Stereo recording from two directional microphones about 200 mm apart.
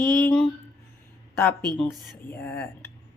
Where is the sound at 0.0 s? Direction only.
5° left (ahead or behind).